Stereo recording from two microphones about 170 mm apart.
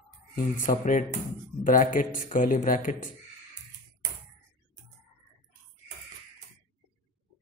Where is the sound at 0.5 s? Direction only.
50° left (ahead or behind).